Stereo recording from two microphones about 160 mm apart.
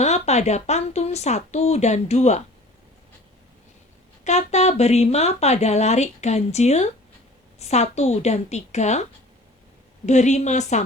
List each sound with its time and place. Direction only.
0.0 s speech: 45° left (ahead or behind)
4.2 s speech: 45° left (ahead or behind)
10.1 s speech: 45° left (ahead or behind)